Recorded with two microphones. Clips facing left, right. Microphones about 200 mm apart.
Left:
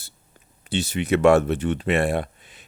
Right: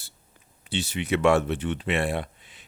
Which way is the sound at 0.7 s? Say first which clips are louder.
Left 4 dB; 45° left (ahead or behind).